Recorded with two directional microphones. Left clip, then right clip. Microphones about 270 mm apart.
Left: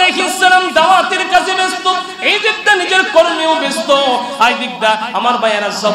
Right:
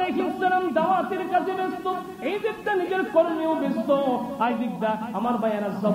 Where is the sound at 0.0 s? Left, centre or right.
Centre.